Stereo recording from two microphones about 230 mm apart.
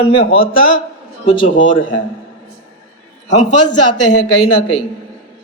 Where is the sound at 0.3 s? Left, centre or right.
Left.